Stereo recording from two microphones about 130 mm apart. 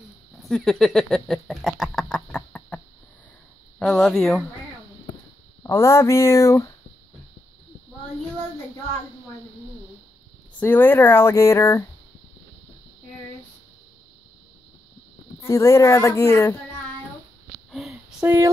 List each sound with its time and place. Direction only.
0.4 s a sound: 5° left (ahead or behind)
3.8 s speech: 5° left (ahead or behind)
5.6 s speech: 20° left (ahead or behind)
10.6 s speech: 15° left (ahead or behind)
15.4 s speech: 20° left (ahead or behind)
17.6 s sniff: centre (ahead or behind)
18.2 s speech: 20° right (ahead or behind)